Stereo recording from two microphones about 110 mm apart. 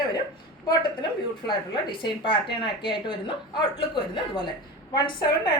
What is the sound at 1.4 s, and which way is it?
Speech, 45° left (ahead or behind).